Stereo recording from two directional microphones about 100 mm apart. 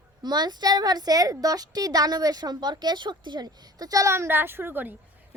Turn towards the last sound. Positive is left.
turn(degrees=-20)  # may be behind; listen again after turning